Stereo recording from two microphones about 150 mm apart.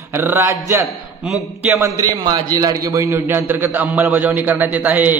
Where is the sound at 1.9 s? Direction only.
25° right (ahead or behind).